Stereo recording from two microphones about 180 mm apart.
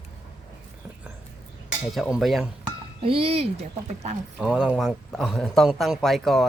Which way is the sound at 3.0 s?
30° right (ahead or behind).